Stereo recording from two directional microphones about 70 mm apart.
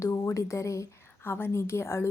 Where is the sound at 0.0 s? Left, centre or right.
Left.